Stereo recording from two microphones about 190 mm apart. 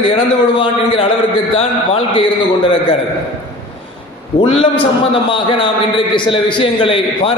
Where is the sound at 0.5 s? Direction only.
25° left (ahead or behind).